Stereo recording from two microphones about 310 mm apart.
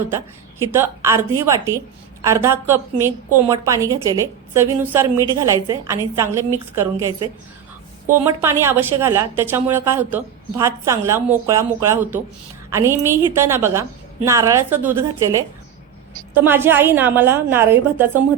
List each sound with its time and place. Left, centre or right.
0.7 s a woman's voice: centre